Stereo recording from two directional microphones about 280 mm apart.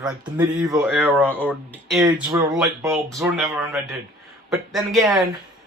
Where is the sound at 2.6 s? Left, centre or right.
Centre.